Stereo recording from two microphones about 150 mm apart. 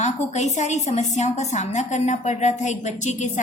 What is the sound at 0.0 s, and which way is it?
A woman's voice, 50° left (ahead or behind).